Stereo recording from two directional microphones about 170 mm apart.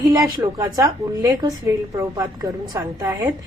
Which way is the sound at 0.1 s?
20° right (ahead or behind).